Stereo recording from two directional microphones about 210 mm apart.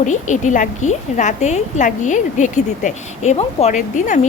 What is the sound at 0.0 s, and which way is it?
A woman's voice, 35° left (ahead or behind).